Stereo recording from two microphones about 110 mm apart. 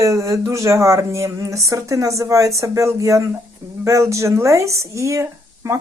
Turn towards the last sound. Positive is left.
turn(degrees=-25)  # may be behind; listen again after turning